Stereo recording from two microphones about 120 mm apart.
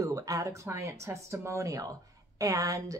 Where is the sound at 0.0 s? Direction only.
30° right (ahead or behind).